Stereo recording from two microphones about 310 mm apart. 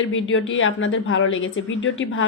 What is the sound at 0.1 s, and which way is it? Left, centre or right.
A woman's voice, left.